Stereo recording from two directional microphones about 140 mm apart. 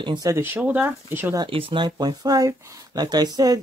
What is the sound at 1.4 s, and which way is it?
Speech, 40° right (ahead or behind).